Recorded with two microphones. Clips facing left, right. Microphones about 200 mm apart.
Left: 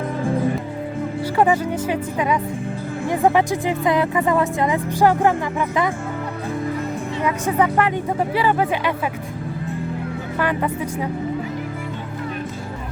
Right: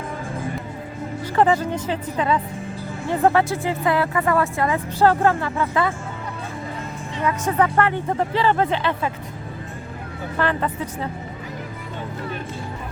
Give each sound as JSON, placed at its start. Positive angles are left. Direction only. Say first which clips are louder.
{"t": 1.4, "sound": "speech", "louder": "even", "side_deg": 10}
{"t": 7.3, "sound": "speech", "louder": "even", "side_deg": 10}
{"t": 10.3, "sound": "speech", "louder": "left 1 dB", "side_deg": 10}